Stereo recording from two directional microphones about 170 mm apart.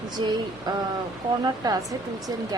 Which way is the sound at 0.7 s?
25° right (ahead or behind).